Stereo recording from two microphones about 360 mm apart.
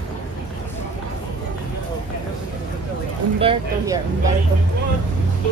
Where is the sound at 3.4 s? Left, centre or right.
Centre.